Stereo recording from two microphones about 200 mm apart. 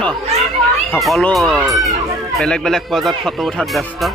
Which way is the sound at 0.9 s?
5° left (ahead or behind).